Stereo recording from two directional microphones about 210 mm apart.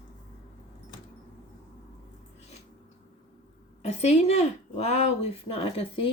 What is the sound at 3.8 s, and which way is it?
Speech, 30° left (ahead or behind).